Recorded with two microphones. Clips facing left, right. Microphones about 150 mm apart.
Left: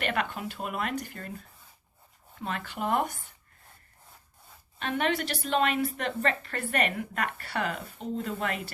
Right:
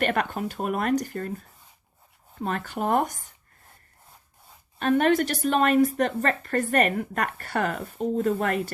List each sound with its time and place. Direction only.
0.0 s a woman's voice: 45° right (ahead or behind)
4.8 s a woman's voice: 45° right (ahead or behind)